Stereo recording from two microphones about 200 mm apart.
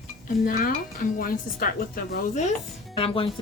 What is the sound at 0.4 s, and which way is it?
A woman's voice, 45° left (ahead or behind).